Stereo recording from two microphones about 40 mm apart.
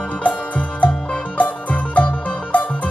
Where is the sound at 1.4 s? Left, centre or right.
Left.